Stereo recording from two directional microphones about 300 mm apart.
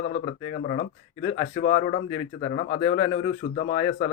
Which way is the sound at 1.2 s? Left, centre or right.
Centre.